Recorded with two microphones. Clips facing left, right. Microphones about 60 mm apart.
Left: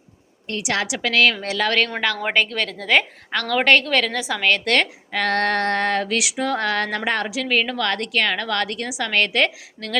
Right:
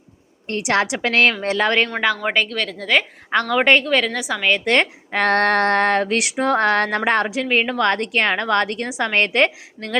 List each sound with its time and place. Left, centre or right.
0.4 s a woman's voice: right
1.9 s a woman's voice: centre
3.3 s a woman's voice: centre
5.1 s female singing: right
7.4 s a woman's voice: right